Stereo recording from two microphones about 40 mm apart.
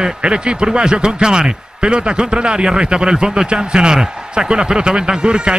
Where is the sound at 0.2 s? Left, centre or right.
Right.